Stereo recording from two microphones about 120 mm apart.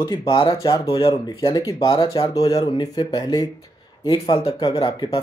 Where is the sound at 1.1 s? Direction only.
30° left (ahead or behind).